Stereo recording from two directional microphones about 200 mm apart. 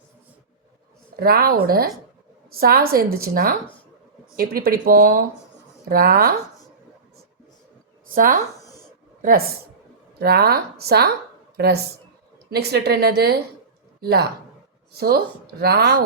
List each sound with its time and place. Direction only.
1.2 s a woman's voice: 50° right (ahead or behind)
8.0 s a sound: 45° right (ahead or behind)
9.2 s a woman's voice: 50° right (ahead or behind)